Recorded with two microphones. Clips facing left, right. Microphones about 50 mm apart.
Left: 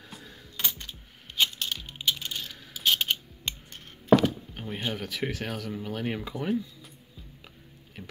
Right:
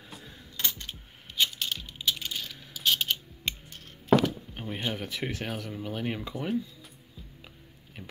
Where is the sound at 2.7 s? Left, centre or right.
Left.